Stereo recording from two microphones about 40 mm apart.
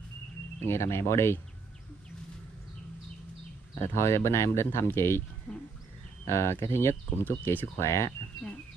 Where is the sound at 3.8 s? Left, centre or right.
Left.